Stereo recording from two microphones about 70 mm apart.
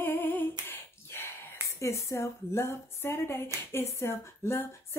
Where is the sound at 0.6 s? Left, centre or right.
Left.